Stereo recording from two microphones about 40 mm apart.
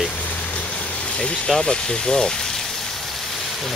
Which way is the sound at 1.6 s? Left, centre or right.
Centre.